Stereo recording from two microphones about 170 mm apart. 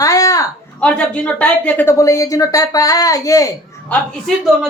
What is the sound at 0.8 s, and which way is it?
A woman's voice, 5° left (ahead or behind).